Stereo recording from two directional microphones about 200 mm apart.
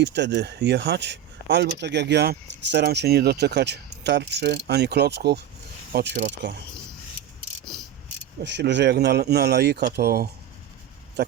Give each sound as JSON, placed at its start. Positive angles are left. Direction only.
{"t": 0.0, "sound": "speech", "side_deg": -60}
{"t": 7.6, "sound": "cricket", "side_deg": 5}
{"t": 8.4, "sound": "speech", "side_deg": -60}